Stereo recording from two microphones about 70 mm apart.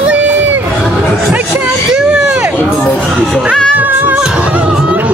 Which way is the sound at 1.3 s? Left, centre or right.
Right.